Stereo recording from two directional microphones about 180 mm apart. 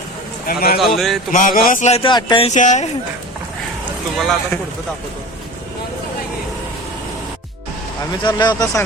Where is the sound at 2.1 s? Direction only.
25° left (ahead or behind); by 2.9 s 40° left (ahead or behind).